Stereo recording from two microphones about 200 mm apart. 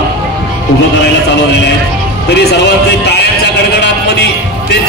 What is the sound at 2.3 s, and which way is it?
Music, 55° left (ahead or behind).